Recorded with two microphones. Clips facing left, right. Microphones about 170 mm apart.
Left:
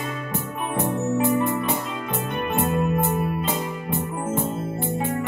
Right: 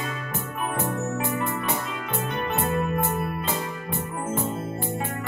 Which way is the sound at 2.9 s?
15° left (ahead or behind).